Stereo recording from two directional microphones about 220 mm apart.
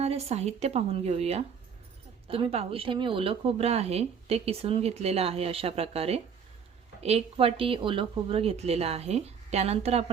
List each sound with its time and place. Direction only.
0.0 s speech: 30° right (ahead or behind)